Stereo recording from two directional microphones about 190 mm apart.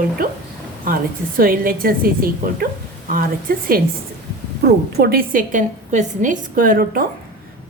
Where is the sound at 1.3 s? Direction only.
50° right (ahead or behind).